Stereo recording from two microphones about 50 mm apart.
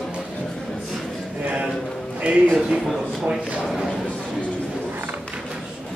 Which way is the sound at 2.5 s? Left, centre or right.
Centre.